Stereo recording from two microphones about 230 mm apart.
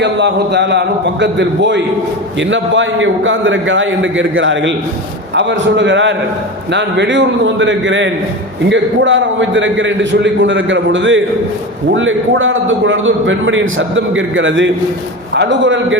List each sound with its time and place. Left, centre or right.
0.0 s a man's voice: right